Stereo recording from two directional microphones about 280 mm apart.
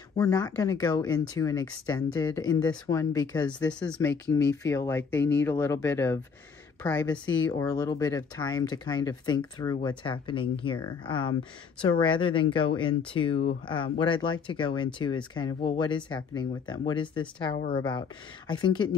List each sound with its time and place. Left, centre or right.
0.2 s speech: centre